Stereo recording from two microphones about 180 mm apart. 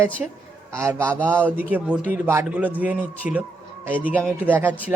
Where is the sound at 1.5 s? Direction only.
10° right (ahead or behind).